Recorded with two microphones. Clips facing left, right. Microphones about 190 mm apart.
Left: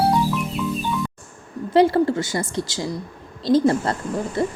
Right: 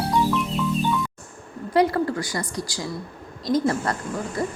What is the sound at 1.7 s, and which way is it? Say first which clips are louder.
A woman's voice: left 4 dB; 25° left (ahead or behind).